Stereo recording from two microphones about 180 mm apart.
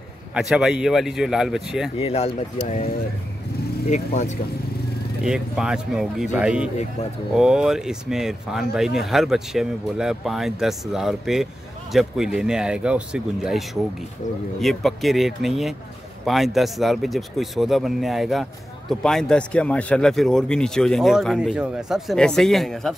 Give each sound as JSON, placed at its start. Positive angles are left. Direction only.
{"t": 0.3, "sound": "speech", "side_deg": -5}
{"t": 2.0, "sound": "speech", "side_deg": 35}
{"t": 3.9, "sound": "speech", "side_deg": 40}
{"t": 5.2, "sound": "speech", "side_deg": -5}